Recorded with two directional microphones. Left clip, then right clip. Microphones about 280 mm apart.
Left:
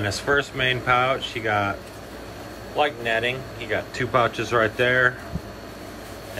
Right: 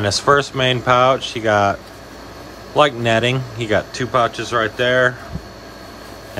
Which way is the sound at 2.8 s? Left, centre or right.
Centre.